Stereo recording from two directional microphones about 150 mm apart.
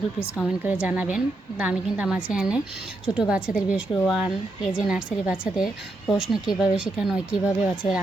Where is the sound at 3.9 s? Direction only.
5° left (ahead or behind).